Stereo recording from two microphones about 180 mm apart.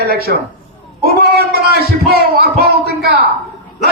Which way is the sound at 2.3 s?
60° right (ahead or behind).